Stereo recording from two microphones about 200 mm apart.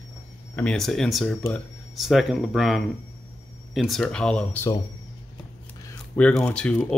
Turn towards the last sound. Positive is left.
turn(degrees=5)  # may be behind; listen again after turning